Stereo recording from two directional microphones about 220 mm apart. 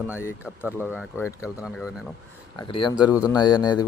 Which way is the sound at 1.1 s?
10° left (ahead or behind).